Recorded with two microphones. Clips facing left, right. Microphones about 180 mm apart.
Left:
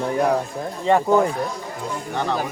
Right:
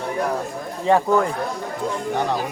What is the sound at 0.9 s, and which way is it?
Speech, 15° left (ahead or behind).